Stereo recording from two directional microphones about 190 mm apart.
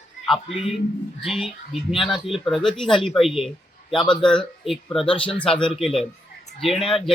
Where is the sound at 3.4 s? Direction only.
Centre (ahead or behind).